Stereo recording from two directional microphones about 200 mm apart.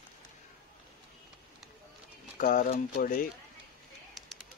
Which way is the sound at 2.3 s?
40° left (ahead or behind).